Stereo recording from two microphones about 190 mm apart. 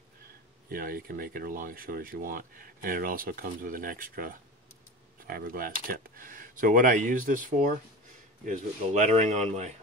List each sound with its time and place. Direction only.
0.7 s speech: 50° right (ahead or behind)